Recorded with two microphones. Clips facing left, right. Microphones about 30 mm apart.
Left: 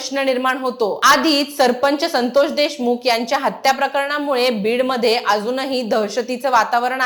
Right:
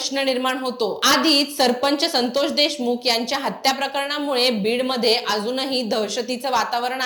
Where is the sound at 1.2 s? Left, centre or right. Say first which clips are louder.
Left 1 dB; right.